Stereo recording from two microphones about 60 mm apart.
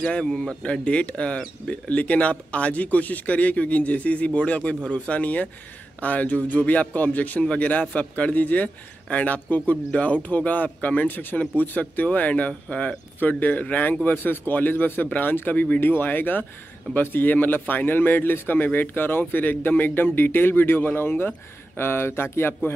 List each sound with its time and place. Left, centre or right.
0.2 s speech: centre; by 22.6 s left